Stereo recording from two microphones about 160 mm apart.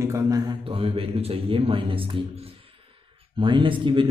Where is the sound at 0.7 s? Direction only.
35° right (ahead or behind).